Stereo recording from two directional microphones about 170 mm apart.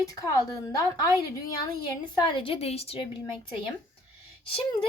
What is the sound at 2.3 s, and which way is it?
A woman's voice, 30° left (ahead or behind).